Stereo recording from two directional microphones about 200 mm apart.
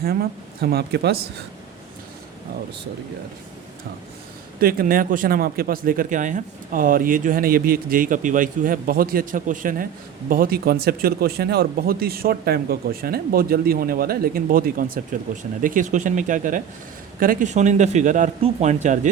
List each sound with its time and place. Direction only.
0.0 s speech: 50° right (ahead or behind)
4.6 s speech: 45° right (ahead or behind)